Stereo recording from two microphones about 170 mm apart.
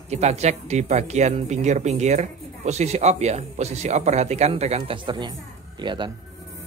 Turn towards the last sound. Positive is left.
turn(degrees=-25)  # may be behind; listen again after turning